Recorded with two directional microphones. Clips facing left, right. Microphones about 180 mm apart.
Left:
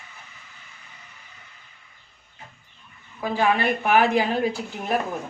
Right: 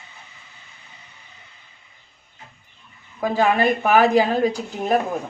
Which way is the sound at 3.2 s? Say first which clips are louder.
Right 4 dB; 40° right (ahead or behind).